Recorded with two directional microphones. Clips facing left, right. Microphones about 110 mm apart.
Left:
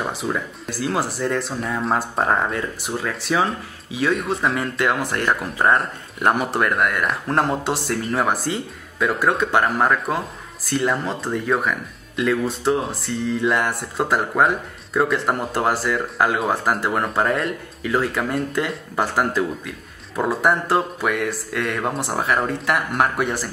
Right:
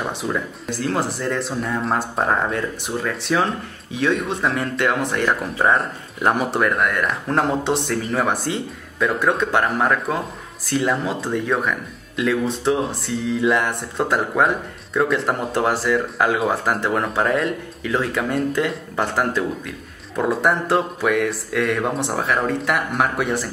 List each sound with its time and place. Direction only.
0.0 s speech: 5° left (ahead or behind)